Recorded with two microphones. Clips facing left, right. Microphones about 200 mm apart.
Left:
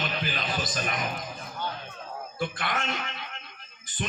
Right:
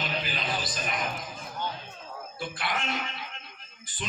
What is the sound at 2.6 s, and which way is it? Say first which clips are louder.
Speech: left 1 dB; 45° left (ahead or behind).